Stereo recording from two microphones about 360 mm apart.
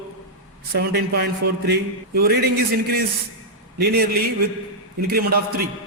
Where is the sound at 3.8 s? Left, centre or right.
Right.